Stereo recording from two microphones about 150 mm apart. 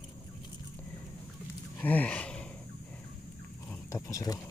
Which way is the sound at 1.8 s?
10° left (ahead or behind).